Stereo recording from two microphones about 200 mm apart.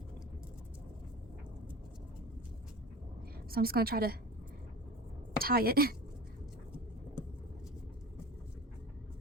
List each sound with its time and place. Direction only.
3.5 s a woman's voice: 50° right (ahead or behind)
5.4 s a woman's voice: 50° right (ahead or behind)